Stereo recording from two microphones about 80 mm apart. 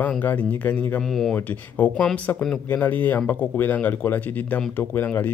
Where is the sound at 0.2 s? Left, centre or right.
Left.